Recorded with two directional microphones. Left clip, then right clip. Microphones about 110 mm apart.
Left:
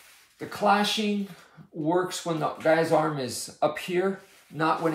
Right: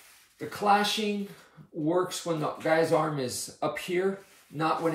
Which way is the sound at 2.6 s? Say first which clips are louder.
Left 3 dB; 40° left (ahead or behind).